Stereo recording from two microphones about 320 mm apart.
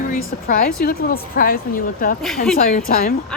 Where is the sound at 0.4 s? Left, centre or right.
Left.